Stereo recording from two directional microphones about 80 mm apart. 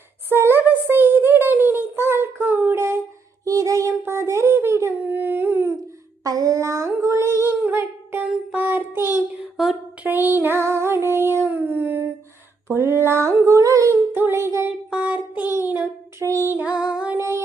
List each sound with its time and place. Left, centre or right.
0.3 s a sound: right
3.4 s child singing: right
5.0 s a sound: right
6.2 s female singing: right
7.7 s child singing: right
12.6 s a sound: right
14.1 s singing: right
14.8 s music: centre
15.5 s child singing: right
16.2 s music: right
16.6 s music: centre
17.2 s music: right